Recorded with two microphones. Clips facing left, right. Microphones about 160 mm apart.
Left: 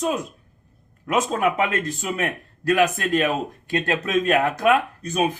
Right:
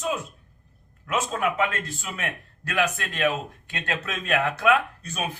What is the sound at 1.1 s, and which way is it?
Speech, 40° left (ahead or behind).